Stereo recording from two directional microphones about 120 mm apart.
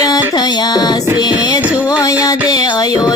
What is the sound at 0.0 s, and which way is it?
Music, 35° left (ahead or behind).